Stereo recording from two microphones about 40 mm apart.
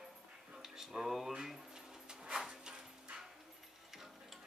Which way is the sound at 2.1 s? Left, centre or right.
Centre.